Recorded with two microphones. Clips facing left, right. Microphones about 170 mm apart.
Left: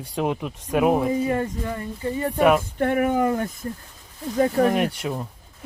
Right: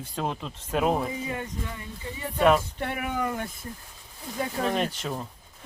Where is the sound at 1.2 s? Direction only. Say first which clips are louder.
Left 9 dB; 50° left (ahead or behind).